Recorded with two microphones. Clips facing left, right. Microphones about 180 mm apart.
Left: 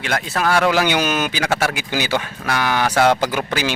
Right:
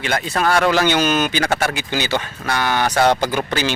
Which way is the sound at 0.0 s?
Centre (ahead or behind).